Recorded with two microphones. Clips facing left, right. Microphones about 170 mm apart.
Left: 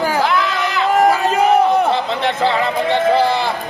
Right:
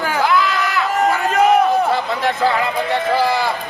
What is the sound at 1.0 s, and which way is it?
Chatter, 35° left (ahead or behind).